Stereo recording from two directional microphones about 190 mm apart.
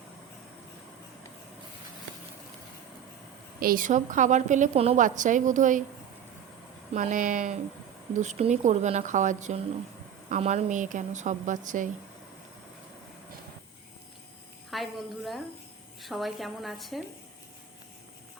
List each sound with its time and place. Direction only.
3.6 s a woman's voice: 50° right (ahead or behind)
6.9 s a woman's voice: 40° right (ahead or behind)
14.7 s a woman's voice: centre (ahead or behind)